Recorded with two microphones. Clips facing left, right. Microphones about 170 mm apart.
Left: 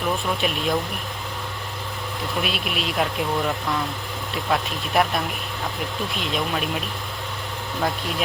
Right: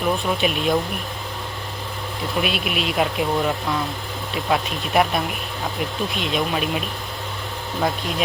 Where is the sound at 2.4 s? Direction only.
Centre (ahead or behind).